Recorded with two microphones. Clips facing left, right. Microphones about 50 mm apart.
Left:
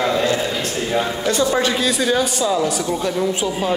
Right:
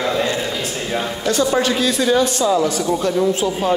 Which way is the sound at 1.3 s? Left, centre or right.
Left.